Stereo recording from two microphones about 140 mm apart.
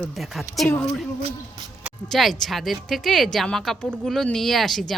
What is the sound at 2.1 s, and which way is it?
A woman's voice, centre (ahead or behind).